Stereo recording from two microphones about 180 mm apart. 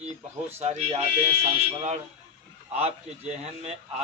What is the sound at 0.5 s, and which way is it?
A man's voice, 35° right (ahead or behind).